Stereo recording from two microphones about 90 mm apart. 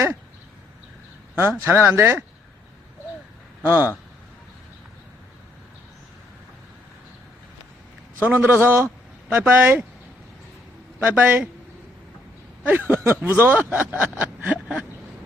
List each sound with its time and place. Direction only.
1.4 s speech: 25° right (ahead or behind)
3.6 s speech: 20° right (ahead or behind)
8.2 s speech: 20° right (ahead or behind)
11.0 s speech: 20° right (ahead or behind)
13.1 s speech: 25° right (ahead or behind)